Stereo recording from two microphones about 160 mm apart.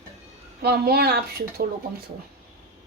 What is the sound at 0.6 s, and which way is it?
Speech, 85° right.